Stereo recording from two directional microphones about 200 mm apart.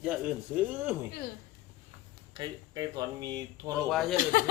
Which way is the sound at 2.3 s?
20° right (ahead or behind).